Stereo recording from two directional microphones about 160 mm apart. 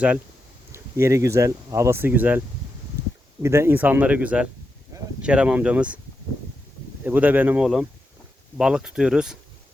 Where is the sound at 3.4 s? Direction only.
15° right (ahead or behind).